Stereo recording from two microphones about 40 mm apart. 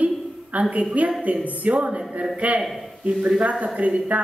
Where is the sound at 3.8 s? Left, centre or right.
Right.